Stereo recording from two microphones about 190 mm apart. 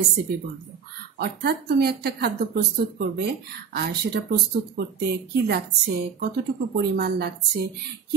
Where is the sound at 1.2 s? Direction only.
55° right (ahead or behind).